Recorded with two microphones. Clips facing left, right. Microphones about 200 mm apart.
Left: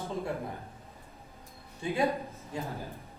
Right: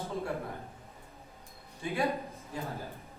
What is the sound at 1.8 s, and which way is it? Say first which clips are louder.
Speech: left 3 dB; 15° left (ahead or behind).